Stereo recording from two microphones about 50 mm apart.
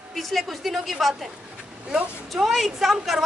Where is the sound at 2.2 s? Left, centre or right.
Centre.